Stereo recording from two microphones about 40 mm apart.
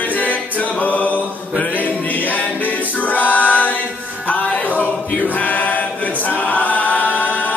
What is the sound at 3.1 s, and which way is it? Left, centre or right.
Choir, left.